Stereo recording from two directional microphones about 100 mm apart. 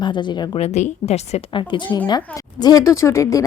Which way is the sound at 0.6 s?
90° left.